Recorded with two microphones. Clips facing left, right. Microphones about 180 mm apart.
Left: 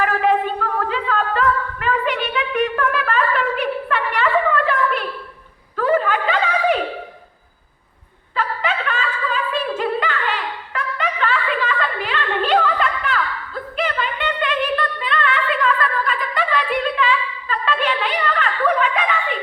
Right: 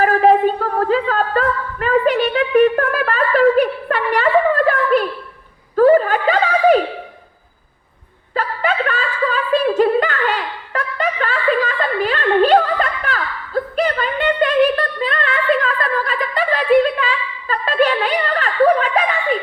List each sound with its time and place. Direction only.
0.0 s a sound: 40° right (ahead or behind)
5.7 s snicker: 40° right (ahead or behind)
8.4 s chuckle: 45° right (ahead or behind)